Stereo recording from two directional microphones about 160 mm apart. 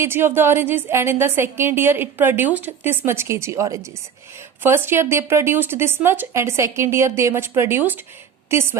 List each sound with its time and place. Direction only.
0.0 s a woman's voice: 15° right (ahead or behind)